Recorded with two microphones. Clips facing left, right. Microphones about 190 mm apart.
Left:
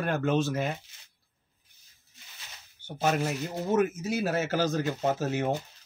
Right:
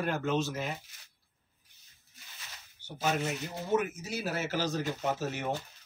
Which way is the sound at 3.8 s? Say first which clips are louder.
Left 8 dB; 50° left (ahead or behind).